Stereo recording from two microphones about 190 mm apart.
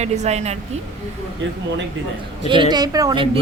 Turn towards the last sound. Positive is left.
turn(degrees=-25)  # may be behind; listen again after turning